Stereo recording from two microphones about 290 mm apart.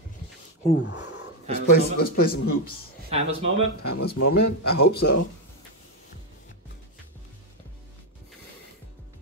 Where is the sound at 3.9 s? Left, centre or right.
Left.